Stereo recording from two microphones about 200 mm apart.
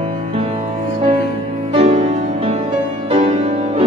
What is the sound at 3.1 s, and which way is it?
Music, 35° right (ahead or behind).